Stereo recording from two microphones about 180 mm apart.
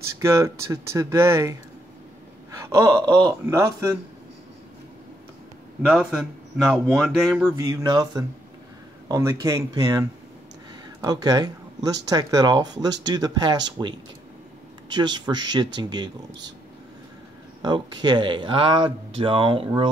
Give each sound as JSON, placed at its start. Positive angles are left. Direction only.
{"t": 0.2, "sound": "speech", "side_deg": -15}
{"t": 2.6, "sound": "speech", "side_deg": -15}
{"t": 5.9, "sound": "a man's voice", "side_deg": -5}
{"t": 7.5, "sound": "speech", "side_deg": -20}
{"t": 17.6, "sound": "speech", "side_deg": -25}